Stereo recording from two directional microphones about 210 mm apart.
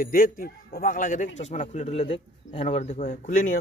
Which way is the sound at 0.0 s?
45° left (ahead or behind).